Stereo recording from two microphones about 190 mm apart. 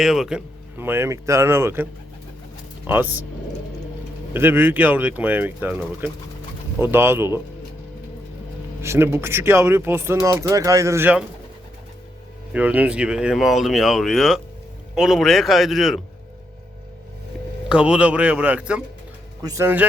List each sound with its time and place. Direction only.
0.0 s speech: centre (ahead or behind)
4.4 s speech: 10° right (ahead or behind)
8.8 s speech: 15° right (ahead or behind)
12.5 s speech: 5° right (ahead or behind)
17.7 s speech: 5° right (ahead or behind)
19.4 s speech: 20° right (ahead or behind)